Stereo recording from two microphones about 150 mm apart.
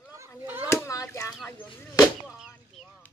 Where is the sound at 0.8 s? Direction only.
20° left (ahead or behind).